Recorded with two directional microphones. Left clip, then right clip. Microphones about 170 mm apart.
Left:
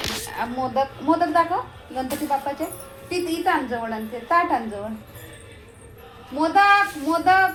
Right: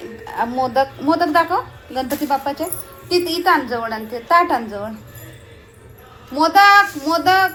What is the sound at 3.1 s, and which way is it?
A woman's voice, 75° right (ahead or behind).